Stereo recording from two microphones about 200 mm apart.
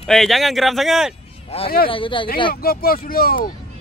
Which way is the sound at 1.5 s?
30° left (ahead or behind).